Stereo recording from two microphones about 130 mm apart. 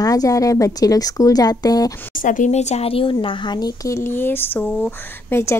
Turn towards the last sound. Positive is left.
turn(degrees=20)  # may be behind; listen again after turning